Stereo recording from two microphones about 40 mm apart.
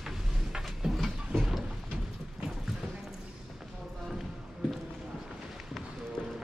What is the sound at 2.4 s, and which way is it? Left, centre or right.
Clip-clop, centre.